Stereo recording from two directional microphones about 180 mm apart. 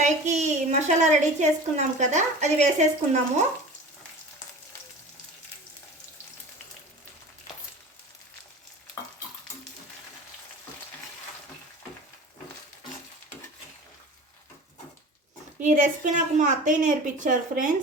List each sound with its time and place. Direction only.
0.0 s a woman's voice: 40° right (ahead or behind)
15.6 s a woman's voice: 45° right (ahead or behind)